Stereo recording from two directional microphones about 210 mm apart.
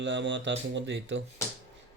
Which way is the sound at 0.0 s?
60° right (ahead or behind).